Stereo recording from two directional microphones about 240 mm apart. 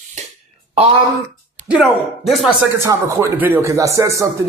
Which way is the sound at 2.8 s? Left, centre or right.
Centre.